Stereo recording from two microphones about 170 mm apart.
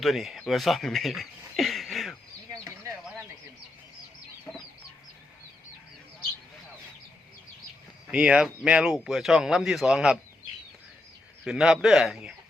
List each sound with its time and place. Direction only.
0.0 s speech: centre (ahead or behind)
2.5 s a sound: 15° right (ahead or behind)
8.1 s speech: 5° right (ahead or behind)
11.4 s speech: 5° right (ahead or behind)